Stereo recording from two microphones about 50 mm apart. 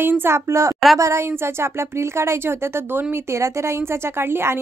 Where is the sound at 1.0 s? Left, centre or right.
Right.